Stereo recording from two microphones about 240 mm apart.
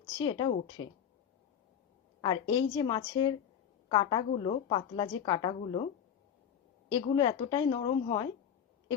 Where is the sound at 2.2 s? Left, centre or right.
Centre.